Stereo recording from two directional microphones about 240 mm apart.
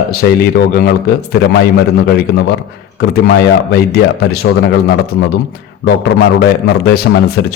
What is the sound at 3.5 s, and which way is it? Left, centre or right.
Speech, left.